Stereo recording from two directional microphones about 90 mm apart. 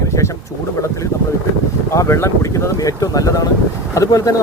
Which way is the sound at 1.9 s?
30° left (ahead or behind).